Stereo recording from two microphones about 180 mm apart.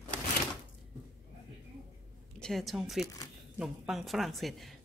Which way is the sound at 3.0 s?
20° left (ahead or behind).